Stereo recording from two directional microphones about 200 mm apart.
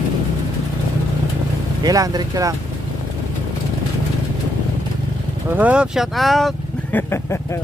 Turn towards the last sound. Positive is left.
turn(degrees=10)  # may be behind; listen again after turning